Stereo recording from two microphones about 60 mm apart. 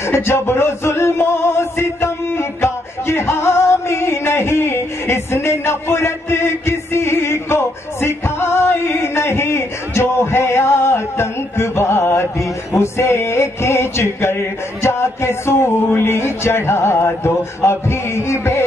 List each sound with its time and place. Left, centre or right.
0.0 s music: left
15.9 s speech: left